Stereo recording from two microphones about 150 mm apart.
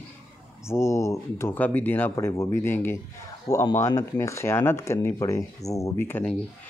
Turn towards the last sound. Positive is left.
turn(degrees=15)  # may be behind; listen again after turning